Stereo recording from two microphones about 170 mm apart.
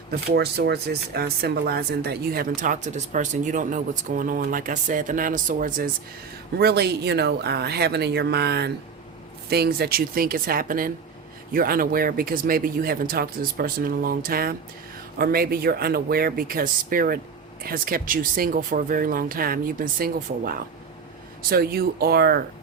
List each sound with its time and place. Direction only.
0.1 s speech: 75° right (ahead or behind); by 5.9 s 55° right (ahead or behind)
6.6 s speech: 70° right (ahead or behind)